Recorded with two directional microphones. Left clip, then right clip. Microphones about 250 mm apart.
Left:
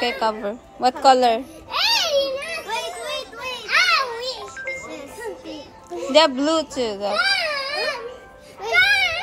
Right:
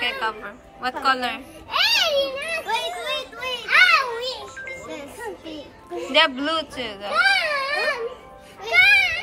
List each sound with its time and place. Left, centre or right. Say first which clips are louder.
0.0 s a woman's voice: left 3 dB; centre
1.7 s children playing: even; centre
6.1 s speech: left 3 dB; centre
7.2 s baby cry: right 3 dB; centre
7.7 s music: right 2 dB; centre